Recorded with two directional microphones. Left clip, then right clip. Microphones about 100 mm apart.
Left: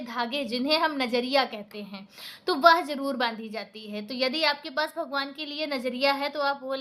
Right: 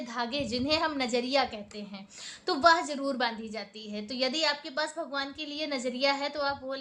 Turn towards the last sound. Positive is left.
turn(degrees=40)  # may be behind; listen again after turning